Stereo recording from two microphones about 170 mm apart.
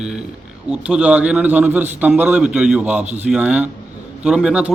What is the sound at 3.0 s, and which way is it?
Speech, 40° right (ahead or behind).